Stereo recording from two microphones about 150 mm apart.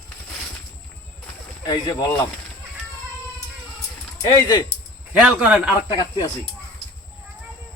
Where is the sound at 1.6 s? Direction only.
30° left (ahead or behind).